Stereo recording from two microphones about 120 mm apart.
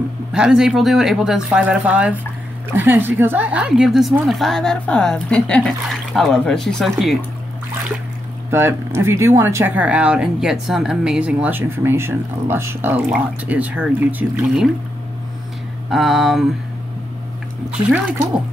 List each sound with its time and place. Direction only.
0.3 s a woman's voice: 5° right (ahead or behind)
8.5 s speech: 20° right (ahead or behind)
15.9 s a woman's voice: centre (ahead or behind)
17.6 s speech: 5° right (ahead or behind)